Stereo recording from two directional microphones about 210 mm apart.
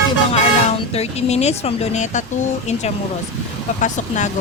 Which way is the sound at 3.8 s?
35° left (ahead or behind).